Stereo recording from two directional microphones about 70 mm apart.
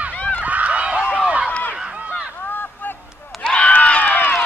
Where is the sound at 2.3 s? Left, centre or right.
Left.